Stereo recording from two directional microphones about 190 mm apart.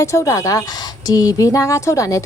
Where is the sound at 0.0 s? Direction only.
15° left (ahead or behind).